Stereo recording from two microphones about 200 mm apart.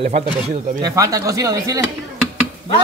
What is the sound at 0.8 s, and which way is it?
A man's voice, 15° right (ahead or behind).